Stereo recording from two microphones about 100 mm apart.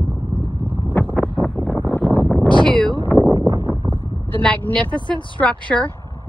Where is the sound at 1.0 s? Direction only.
20° left (ahead or behind).